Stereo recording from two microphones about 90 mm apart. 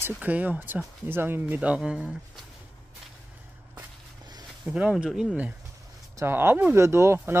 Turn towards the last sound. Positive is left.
turn(degrees=-30)  # may be behind; listen again after turning